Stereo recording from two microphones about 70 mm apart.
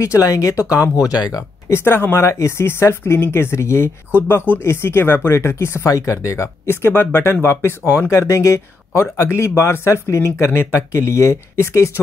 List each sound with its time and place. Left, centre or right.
0.0 s speech: left
1.7 s speech: left
2.2 s speech: left
5.9 s speech: left